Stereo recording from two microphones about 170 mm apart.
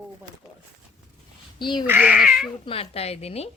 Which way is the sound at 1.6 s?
25° left (ahead or behind).